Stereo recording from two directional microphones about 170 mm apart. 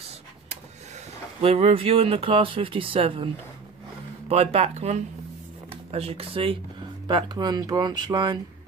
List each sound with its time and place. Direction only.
1.4 s speech: 35° right (ahead or behind)
4.3 s speech: 35° right (ahead or behind)